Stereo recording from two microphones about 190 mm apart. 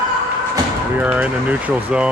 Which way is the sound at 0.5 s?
10° right (ahead or behind).